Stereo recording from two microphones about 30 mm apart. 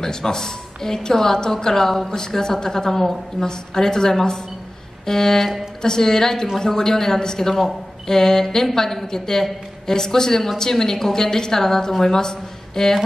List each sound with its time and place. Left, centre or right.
0.0 s a woman's voice: centre